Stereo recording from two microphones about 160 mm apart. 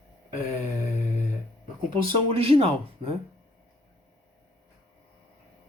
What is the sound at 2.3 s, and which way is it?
Speech, 35° right (ahead or behind).